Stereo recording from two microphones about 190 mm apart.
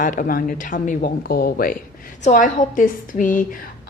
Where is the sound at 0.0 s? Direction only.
45° left (ahead or behind).